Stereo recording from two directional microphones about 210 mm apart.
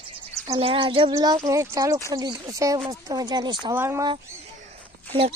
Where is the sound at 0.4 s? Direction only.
20° right (ahead or behind).